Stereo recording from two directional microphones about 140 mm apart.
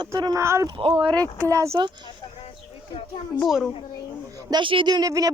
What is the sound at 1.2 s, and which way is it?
Speech, 25° right (ahead or behind).